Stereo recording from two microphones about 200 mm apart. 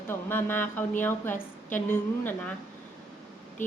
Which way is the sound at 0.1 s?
10° left (ahead or behind).